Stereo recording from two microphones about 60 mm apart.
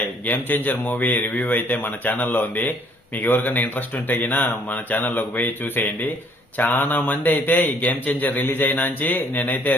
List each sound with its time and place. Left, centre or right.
0.3 s a man's voice: left